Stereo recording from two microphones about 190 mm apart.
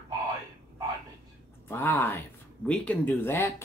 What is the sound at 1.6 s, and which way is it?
Speech, 10° left (ahead or behind).